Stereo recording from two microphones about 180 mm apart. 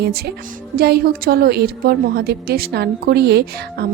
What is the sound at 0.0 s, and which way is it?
A woman's voice, 60° right (ahead or behind).